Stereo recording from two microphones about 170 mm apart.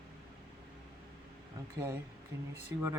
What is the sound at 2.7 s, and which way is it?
Speech, 15° right (ahead or behind).